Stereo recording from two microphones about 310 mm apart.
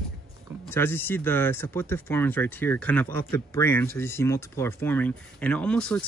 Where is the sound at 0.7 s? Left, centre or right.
Centre.